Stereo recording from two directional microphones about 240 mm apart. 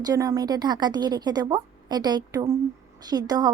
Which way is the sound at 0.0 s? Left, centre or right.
Centre.